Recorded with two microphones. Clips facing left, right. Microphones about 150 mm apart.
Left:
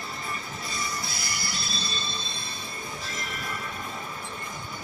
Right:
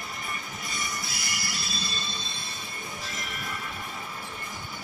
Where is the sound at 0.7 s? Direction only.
25° left (ahead or behind).